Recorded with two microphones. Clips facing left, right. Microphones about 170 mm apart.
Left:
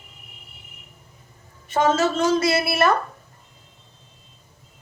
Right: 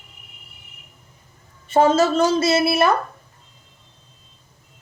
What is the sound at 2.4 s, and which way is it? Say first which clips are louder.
Speech: right 3 dB; 25° right (ahead or behind).